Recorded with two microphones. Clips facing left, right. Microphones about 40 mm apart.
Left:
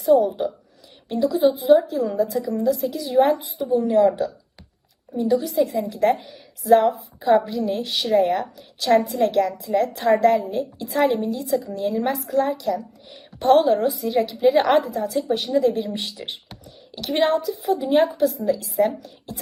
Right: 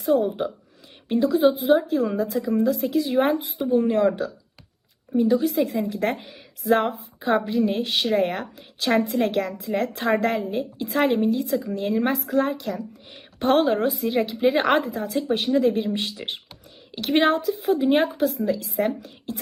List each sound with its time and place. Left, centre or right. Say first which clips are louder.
0.0 s a woman's voice: left 4 dB; right